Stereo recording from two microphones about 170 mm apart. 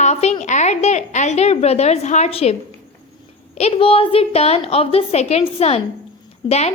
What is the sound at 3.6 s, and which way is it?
A woman's voice, 35° left (ahead or behind).